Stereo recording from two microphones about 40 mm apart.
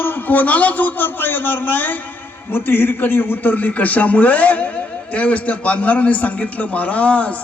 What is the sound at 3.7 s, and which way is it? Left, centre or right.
A man's voice, left.